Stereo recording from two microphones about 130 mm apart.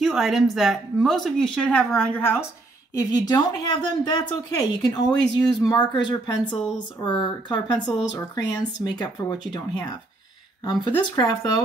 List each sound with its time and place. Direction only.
0.0 s a woman's voice: 5° right (ahead or behind); by 2.4 s 15° left (ahead or behind)
2.9 s speech: 30° left (ahead or behind)